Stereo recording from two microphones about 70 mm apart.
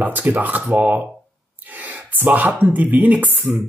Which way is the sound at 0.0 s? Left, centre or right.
Right.